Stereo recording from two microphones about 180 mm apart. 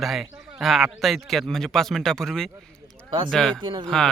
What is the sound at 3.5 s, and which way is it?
Speech, 25° right (ahead or behind).